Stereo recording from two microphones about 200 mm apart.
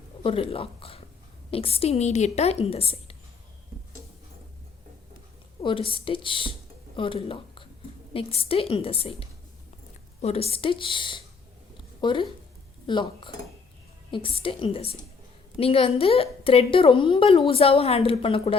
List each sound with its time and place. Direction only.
0.2 s a woman's voice: 25° left (ahead or behind)
5.9 s a woman's voice: 25° left (ahead or behind)